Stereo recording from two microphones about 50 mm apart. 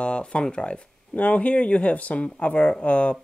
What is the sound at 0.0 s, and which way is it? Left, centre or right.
Speech, left.